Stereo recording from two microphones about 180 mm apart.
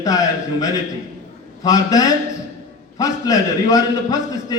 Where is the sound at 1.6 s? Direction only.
20° left (ahead or behind).